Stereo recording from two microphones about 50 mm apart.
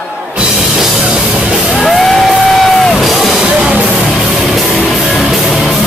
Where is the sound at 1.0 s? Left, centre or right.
Centre.